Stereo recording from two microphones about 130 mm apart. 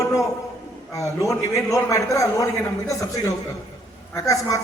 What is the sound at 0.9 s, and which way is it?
A man's voice, 25° left (ahead or behind).